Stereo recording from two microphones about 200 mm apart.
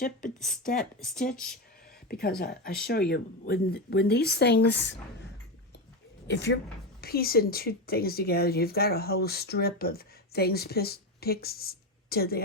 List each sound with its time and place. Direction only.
0.3 s speech: centre (ahead or behind)
0.6 s speech: 45° left (ahead or behind)
2.4 s speech: 50° left (ahead or behind)
6.2 s speech: 60° left (ahead or behind)
7.0 s speech: 50° left (ahead or behind)